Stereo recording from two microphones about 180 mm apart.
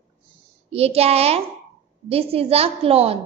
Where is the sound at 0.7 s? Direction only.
35° right (ahead or behind).